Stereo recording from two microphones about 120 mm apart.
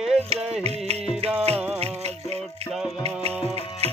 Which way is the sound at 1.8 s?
60° right (ahead or behind).